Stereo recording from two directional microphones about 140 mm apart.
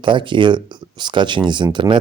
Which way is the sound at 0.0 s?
35° right (ahead or behind).